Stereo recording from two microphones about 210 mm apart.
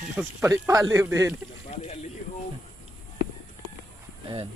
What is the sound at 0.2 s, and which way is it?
Speech, 10° right (ahead or behind).